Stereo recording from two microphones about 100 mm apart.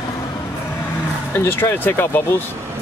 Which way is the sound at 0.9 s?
20° left (ahead or behind).